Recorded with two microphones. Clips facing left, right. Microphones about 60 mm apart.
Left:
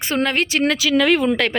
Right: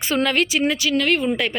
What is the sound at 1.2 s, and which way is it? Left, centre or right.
Speech, left.